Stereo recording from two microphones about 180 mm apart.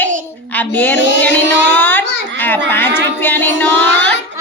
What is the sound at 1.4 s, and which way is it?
Speech, 90° right.